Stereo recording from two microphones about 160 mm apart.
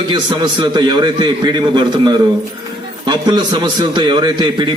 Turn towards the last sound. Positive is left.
turn(degrees=-30)  # may be behind; listen again after turning